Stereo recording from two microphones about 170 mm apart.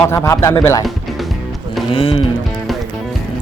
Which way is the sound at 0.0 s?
15° left (ahead or behind).